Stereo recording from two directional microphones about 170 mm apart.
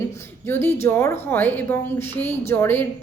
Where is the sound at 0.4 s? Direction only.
15° left (ahead or behind).